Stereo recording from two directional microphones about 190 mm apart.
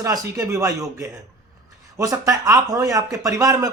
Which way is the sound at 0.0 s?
15° right (ahead or behind).